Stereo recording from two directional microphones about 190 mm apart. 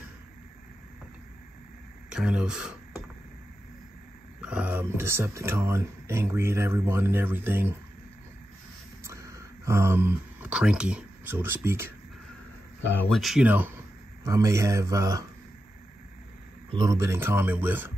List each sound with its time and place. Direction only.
2.0 s speech: 5° right (ahead or behind)
4.4 s speech: 5° right (ahead or behind)
9.0 s speech: 15° right (ahead or behind)
13.1 s speech: centre (ahead or behind); by 15.2 s 15° right (ahead or behind)
16.7 s speech: 15° right (ahead or behind)